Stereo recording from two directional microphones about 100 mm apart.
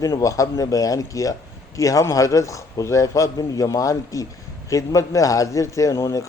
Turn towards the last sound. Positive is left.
turn(degrees=35)  # may be behind; listen again after turning